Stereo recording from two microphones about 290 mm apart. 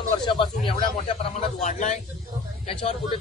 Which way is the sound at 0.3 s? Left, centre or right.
Centre.